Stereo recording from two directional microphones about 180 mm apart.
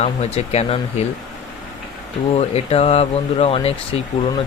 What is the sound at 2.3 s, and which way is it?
Speech, 35° left (ahead or behind).